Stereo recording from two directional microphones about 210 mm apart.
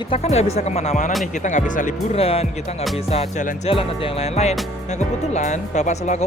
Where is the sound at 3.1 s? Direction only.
30° left (ahead or behind).